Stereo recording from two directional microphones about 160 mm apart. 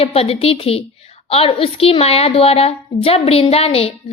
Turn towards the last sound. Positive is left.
turn(degrees=35)  # may be behind; listen again after turning